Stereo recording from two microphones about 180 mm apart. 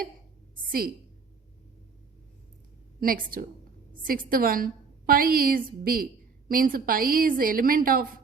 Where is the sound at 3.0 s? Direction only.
50° right (ahead or behind).